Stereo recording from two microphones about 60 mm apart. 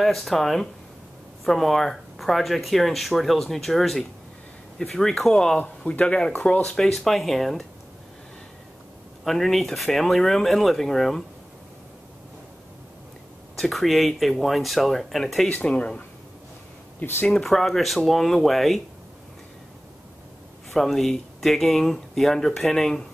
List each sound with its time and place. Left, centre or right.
0.0 s speech: centre
5.6 s speech: left; by 7.6 s centre
9.2 s speech: centre
13.6 s speech: centre
15.4 s speech: centre
17.0 s speech: left
17.3 s speech: centre
20.7 s speech: centre